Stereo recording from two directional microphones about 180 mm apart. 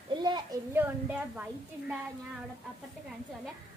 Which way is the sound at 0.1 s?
25° right (ahead or behind).